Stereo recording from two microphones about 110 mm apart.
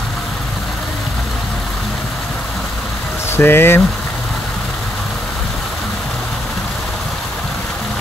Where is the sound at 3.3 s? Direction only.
20° left (ahead or behind).